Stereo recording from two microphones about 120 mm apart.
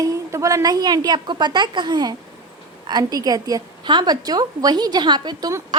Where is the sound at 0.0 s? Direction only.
25° right (ahead or behind).